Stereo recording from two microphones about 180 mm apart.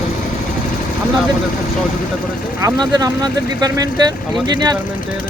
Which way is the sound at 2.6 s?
20° right (ahead or behind).